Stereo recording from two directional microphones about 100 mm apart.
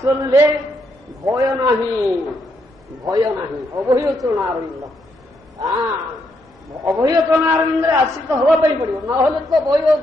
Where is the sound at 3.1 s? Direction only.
35° right (ahead or behind).